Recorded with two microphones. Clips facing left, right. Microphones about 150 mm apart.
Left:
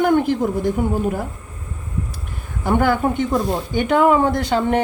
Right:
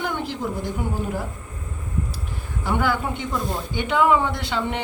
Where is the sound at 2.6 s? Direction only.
50° left (ahead or behind).